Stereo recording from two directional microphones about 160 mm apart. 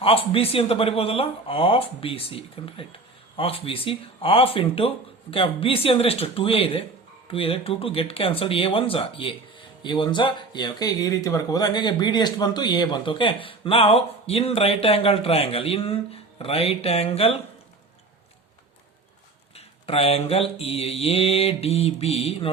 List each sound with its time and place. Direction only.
0.0 s speech: 35° left (ahead or behind)
19.5 s speech: 40° left (ahead or behind)